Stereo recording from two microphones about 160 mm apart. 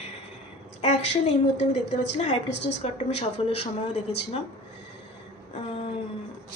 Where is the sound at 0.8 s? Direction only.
45° left (ahead or behind).